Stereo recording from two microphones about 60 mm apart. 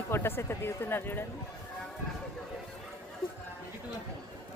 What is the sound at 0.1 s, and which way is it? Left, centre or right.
Speech, left.